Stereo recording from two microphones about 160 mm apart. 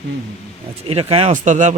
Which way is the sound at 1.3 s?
50° right (ahead or behind).